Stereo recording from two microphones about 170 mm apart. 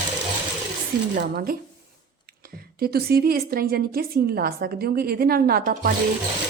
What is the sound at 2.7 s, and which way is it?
A woman's voice, 65° right (ahead or behind).